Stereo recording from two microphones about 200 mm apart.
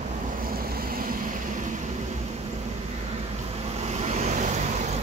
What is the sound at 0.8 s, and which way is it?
Vehicle, 45° right (ahead or behind).